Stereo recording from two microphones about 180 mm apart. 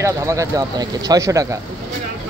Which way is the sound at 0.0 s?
15° right (ahead or behind).